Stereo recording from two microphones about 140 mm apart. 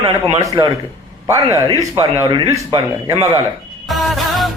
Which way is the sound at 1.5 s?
25° right (ahead or behind).